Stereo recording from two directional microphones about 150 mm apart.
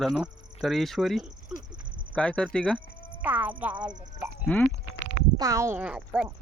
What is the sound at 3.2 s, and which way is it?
Speech, 10° right (ahead or behind).